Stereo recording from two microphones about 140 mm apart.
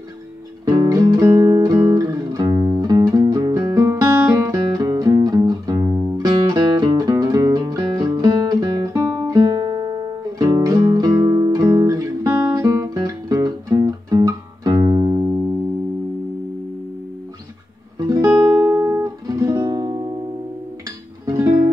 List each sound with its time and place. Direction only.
0.7 s music: 25° right (ahead or behind)
10.4 s guitar: 25° right (ahead or behind)
17.9 s music: 25° right (ahead or behind)
18.3 s music: 15° right (ahead or behind)
21.3 s music: 20° right (ahead or behind)